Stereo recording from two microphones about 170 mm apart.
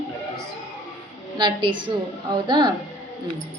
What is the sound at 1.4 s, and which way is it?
Speech, 30° right (ahead or behind).